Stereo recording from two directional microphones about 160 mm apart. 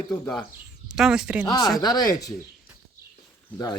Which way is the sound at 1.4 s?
20° left (ahead or behind).